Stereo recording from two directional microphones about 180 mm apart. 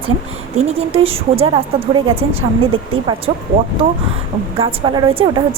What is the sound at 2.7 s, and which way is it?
Speech, 30° right (ahead or behind).